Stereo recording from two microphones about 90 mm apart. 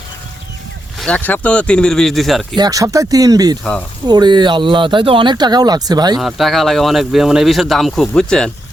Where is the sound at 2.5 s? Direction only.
45° right (ahead or behind).